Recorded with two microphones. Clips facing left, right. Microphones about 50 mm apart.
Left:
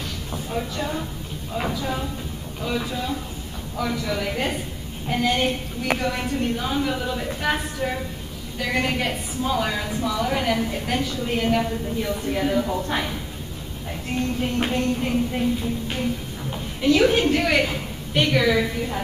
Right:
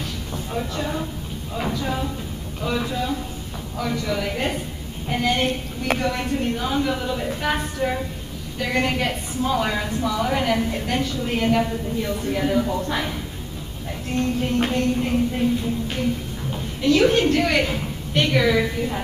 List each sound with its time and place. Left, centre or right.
0.3 s a woman's voice: centre
9.8 s a woman's voice: centre
14.1 s a woman's voice: centre
16.5 s a sound: centre
17.0 s a woman's voice: centre